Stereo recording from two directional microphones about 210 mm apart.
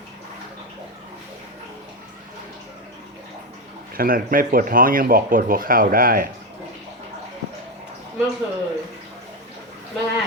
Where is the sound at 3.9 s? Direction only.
45° right (ahead or behind).